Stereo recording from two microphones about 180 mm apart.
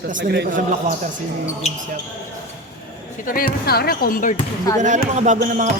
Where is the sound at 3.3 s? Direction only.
50° left (ahead or behind).